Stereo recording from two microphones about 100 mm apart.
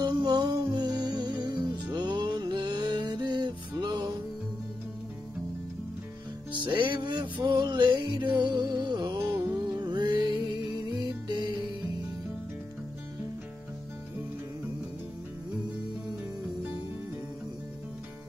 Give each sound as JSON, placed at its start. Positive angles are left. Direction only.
{"t": 0.0, "sound": "music", "side_deg": -45}
{"t": 6.6, "sound": "music", "side_deg": -55}
{"t": 9.2, "sound": "music", "side_deg": -25}
{"t": 9.7, "sound": "music", "side_deg": -45}